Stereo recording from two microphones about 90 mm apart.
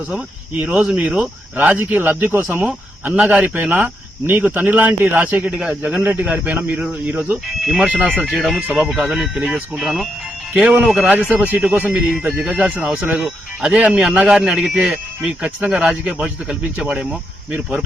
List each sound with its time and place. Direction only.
0.6 s speech: 15° right (ahead or behind)
8.6 s speech: 15° right (ahead or behind)
8.9 s speech: 5° right (ahead or behind)
11.3 s speech: 20° right (ahead or behind)